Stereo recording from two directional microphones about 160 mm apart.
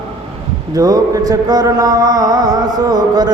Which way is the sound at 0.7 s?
20° right (ahead or behind).